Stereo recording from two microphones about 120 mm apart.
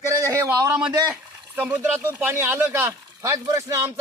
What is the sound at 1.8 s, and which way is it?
Speech, 15° right (ahead or behind).